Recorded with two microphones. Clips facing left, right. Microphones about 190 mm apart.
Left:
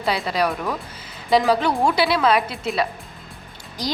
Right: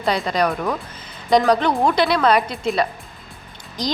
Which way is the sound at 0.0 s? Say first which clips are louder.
Right 2 dB; 5° left (ahead or behind).